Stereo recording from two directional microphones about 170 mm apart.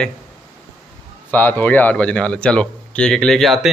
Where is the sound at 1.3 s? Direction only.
10° left (ahead or behind).